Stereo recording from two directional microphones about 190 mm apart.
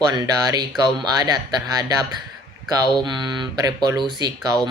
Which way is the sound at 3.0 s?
25° right (ahead or behind).